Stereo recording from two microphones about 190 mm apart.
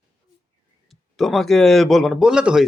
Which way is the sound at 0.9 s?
Centre (ahead or behind).